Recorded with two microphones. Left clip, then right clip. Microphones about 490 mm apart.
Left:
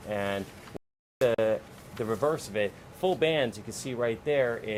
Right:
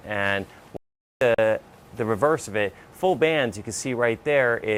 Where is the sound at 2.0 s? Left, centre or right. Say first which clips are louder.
Right 7 dB; right.